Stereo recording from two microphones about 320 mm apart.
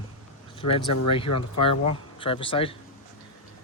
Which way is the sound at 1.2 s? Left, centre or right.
Left.